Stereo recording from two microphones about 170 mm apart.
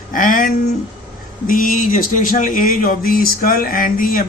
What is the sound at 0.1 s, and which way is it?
A man's voice, 50° left (ahead or behind).